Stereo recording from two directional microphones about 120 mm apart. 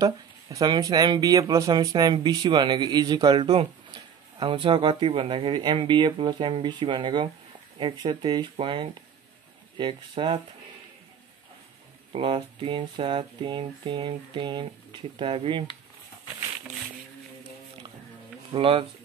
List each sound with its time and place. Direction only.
0.0 s speech: 30° right (ahead or behind)
12.1 s speech: 50° right (ahead or behind)
18.5 s speech: 50° right (ahead or behind)